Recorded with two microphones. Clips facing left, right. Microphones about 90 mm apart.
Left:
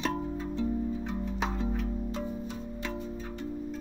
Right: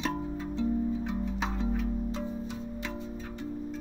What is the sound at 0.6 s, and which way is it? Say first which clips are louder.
Music: right 3 dB; 15° right (ahead or behind).